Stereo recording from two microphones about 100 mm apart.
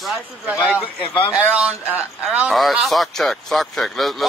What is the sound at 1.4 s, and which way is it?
A man's voice, 15° right (ahead or behind).